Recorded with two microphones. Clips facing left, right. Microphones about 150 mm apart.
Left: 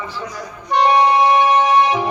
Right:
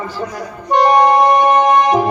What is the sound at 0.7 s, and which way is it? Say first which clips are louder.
A man's voice: right 3 dB; 45° right (ahead or behind).